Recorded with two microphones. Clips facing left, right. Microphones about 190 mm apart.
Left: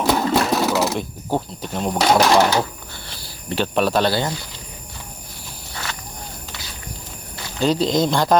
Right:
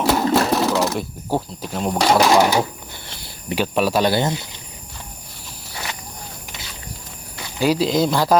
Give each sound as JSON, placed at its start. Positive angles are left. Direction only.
{"t": 0.0, "sound": "vehicle", "side_deg": -5}
{"t": 0.9, "sound": "speech", "side_deg": -5}
{"t": 2.4, "sound": "speech", "side_deg": -15}
{"t": 4.1, "sound": "speech", "side_deg": -20}
{"t": 7.6, "sound": "speech", "side_deg": -5}